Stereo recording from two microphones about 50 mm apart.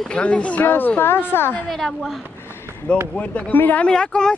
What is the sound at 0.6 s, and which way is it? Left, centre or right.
A woman's voice, left.